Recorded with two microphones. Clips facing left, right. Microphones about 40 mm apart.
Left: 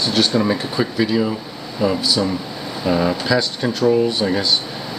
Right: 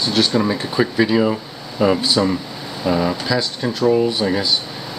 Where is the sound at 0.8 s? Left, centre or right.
Centre.